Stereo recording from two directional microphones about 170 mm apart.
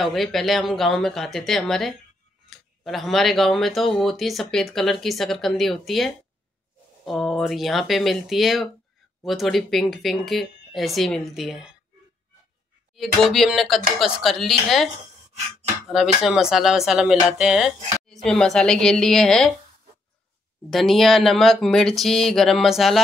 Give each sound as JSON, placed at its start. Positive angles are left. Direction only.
{"t": 0.0, "sound": "speech", "side_deg": 0}
{"t": 12.9, "sound": "speech", "side_deg": 0}
{"t": 15.9, "sound": "speech", "side_deg": 0}
{"t": 20.7, "sound": "speech", "side_deg": 0}